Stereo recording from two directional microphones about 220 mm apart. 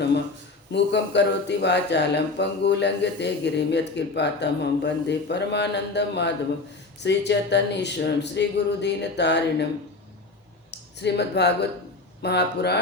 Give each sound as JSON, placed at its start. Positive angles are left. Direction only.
{"t": 0.7, "sound": "speech", "side_deg": 50}
{"t": 10.7, "sound": "speech", "side_deg": 50}